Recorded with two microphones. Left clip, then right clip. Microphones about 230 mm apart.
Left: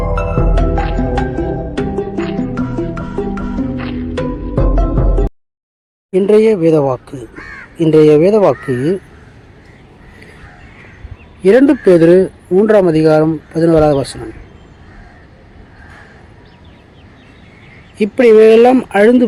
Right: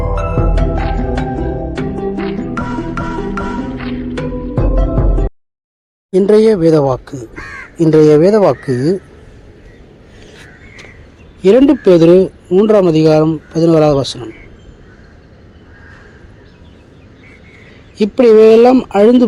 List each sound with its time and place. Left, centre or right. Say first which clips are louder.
0.2 s music: left 1 dB; centre
6.1 s speech: right 1 dB; centre
7.1 s speech: right 1 dB; right
7.8 s speech: even; centre
11.6 s speech: even; centre
17.9 s speech: even; centre